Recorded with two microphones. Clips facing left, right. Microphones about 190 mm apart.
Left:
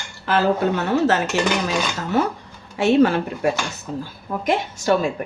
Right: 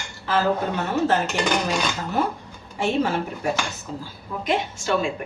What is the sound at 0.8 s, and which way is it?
Speech, 75° left (ahead or behind).